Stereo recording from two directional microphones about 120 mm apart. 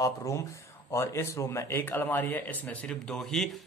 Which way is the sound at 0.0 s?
25° left (ahead or behind).